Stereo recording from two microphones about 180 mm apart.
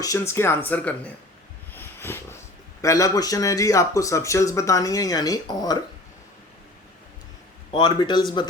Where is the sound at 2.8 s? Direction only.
20° left (ahead or behind).